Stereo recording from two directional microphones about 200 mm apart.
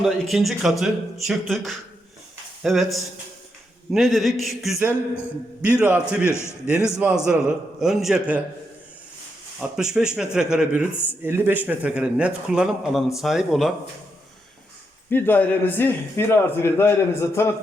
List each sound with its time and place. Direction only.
0.0 s a man's voice: centre (ahead or behind)
6.2 s a man's voice: 15° left (ahead or behind)
6.7 s speech: 5° right (ahead or behind)
9.6 s a man's voice: 5° right (ahead or behind)
15.1 s a man's voice: 10° left (ahead or behind)